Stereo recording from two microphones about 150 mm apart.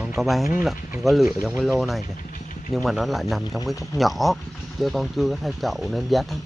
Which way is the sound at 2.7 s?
Centre (ahead or behind).